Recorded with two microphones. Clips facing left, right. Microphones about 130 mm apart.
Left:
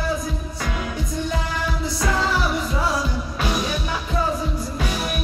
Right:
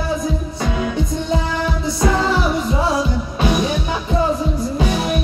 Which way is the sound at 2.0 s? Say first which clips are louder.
Right 5 dB; 25° right (ahead or behind).